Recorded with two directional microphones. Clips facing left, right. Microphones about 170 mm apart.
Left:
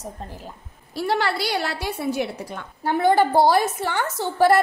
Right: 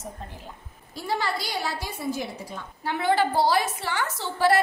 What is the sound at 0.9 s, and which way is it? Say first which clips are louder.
A woman's voice: left 5 dB; 70° left (ahead or behind).